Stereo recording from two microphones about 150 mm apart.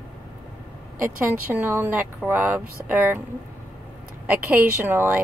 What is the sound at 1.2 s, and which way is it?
Speech, 10° right (ahead or behind).